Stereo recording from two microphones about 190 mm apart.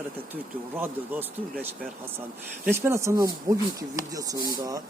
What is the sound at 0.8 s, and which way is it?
Speech, 10° right (ahead or behind).